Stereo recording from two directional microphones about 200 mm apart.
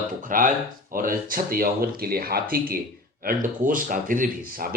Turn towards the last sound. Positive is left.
turn(degrees=-45)  # may be behind; listen again after turning